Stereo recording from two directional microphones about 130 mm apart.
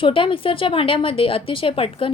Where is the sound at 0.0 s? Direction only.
40° left (ahead or behind).